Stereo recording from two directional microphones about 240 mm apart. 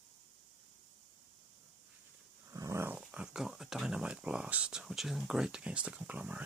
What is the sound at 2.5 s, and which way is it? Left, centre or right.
Speech, centre.